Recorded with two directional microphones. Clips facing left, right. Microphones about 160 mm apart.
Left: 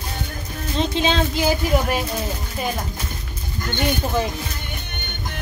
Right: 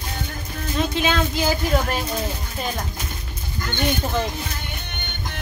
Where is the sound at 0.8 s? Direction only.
20° left (ahead or behind).